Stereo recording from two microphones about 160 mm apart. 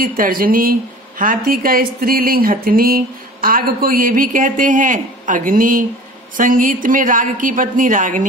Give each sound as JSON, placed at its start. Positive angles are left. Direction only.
{"t": 0.0, "sound": "a woman's voice", "side_deg": -65}